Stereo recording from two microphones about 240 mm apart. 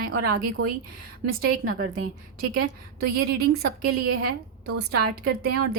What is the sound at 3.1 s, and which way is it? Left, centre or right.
A woman's voice, right.